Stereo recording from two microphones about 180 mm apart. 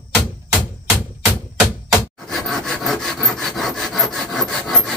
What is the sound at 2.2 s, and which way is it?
Sawing, centre (ahead or behind).